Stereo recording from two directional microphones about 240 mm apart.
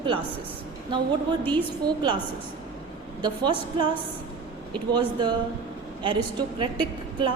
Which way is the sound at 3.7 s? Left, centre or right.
Right.